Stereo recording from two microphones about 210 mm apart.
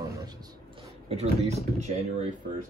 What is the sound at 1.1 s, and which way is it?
Speech, 30° right (ahead or behind).